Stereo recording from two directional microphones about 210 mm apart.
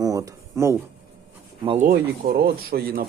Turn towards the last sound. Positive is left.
turn(degrees=-45)  # may be behind; listen again after turning